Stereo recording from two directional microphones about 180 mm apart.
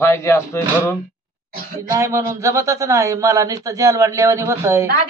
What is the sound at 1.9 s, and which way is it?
A man's voice, 15° right (ahead or behind).